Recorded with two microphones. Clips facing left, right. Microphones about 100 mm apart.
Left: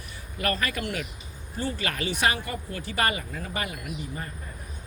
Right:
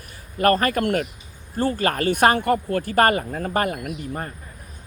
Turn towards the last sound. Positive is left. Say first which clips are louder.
# right 6 dB
turn(degrees=-55)  # may be behind; listen again after turning